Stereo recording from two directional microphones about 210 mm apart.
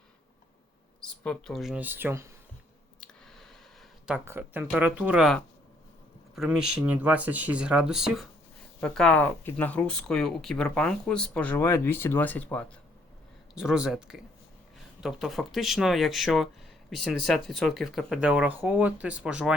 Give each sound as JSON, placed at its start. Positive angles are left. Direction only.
{"t": 1.0, "sound": "speech", "side_deg": 5}
{"t": 4.0, "sound": "speech", "side_deg": -5}
{"t": 13.5, "sound": "speech", "side_deg": -5}